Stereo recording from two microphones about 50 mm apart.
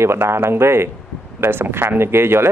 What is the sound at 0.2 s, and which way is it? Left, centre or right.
Speech, right.